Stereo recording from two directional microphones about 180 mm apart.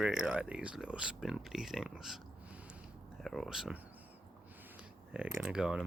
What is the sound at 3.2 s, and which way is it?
Speech, centre (ahead or behind).